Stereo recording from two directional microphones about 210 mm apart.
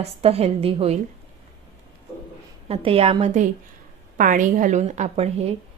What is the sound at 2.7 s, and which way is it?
A woman's voice, 25° right (ahead or behind).